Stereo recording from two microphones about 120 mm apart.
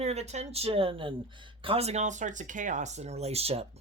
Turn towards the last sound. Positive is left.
turn(degrees=-55)  # may be behind; listen again after turning